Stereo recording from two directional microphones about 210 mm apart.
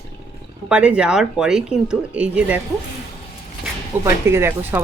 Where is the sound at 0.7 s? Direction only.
5° right (ahead or behind).